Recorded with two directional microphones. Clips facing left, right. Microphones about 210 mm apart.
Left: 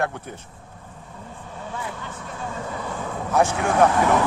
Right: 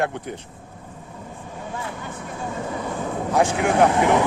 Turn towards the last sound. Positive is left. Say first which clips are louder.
# right 1 dB
turn(degrees=-20)  # may be behind; listen again after turning